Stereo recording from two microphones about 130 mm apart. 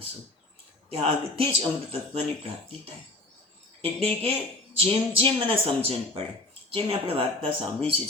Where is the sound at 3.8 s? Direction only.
50° right (ahead or behind).